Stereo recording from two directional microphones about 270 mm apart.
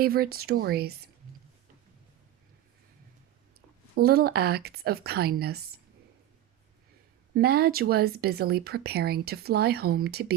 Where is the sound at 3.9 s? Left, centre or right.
Right.